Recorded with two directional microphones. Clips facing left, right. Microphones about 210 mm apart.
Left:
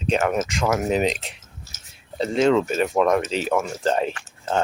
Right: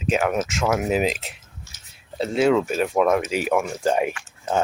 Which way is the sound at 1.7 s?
35° left (ahead or behind).